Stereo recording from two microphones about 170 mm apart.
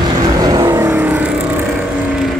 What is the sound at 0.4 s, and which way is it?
Vehicle, 20° right (ahead or behind).